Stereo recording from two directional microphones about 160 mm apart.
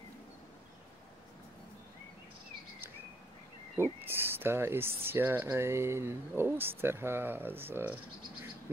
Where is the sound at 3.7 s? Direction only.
15° right (ahead or behind).